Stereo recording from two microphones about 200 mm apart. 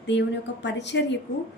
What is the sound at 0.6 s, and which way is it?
Speech, 60° left (ahead or behind).